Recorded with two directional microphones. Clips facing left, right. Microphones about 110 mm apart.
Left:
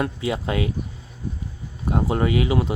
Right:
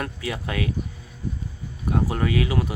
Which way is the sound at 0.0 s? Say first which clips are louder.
Left 5 dB; 20° left (ahead or behind).